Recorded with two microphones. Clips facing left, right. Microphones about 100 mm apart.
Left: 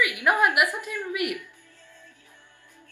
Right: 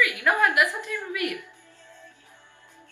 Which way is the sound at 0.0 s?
15° left (ahead or behind).